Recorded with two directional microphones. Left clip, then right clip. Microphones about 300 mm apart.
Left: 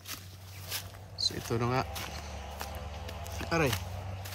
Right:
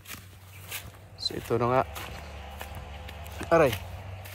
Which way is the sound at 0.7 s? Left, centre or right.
Centre.